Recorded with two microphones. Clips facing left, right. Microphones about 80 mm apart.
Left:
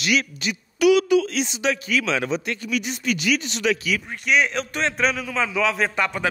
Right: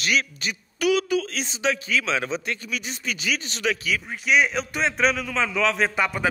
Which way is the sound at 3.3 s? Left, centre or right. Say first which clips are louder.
Left 4 dB; right.